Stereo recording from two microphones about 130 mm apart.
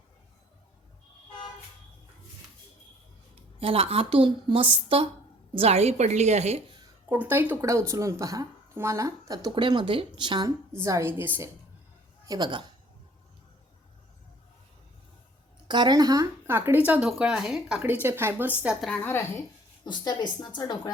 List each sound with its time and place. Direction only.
3.6 s a woman's voice: 45° right (ahead or behind)
7.1 s speech: 15° right (ahead or behind); by 10.5 s 35° right (ahead or behind)
10.8 s speech: 20° right (ahead or behind)
12.2 s speech: 30° right (ahead or behind)
15.6 s speech: 35° right (ahead or behind)
16.5 s speech: 15° right (ahead or behind)
18.8 s a woman's voice: 10° left (ahead or behind)
19.8 s a woman's voice: 35° left (ahead or behind)